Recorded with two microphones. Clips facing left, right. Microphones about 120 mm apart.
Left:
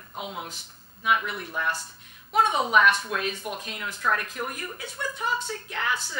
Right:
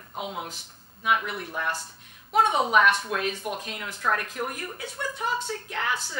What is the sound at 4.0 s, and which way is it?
Speech, 40° right (ahead or behind).